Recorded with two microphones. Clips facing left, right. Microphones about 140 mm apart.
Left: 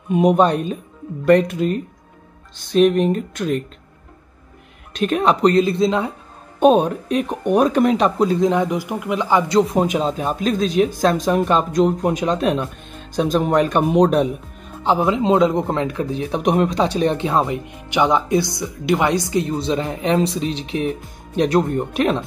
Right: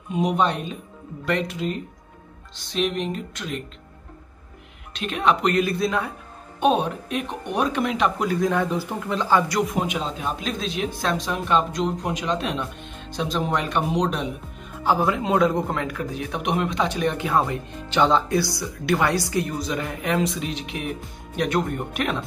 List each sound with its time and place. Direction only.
0.1 s speech: 50° left (ahead or behind)
4.9 s speech: 45° left (ahead or behind); by 6.1 s 25° left (ahead or behind)
6.6 s speech: 40° left (ahead or behind)
8.3 s speech: 20° left (ahead or behind)
9.6 s speech: 35° left (ahead or behind); by 14.3 s 50° left (ahead or behind)
14.8 s speech: 20° left (ahead or behind)